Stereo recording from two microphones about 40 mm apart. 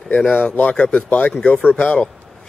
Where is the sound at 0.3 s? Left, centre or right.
Left.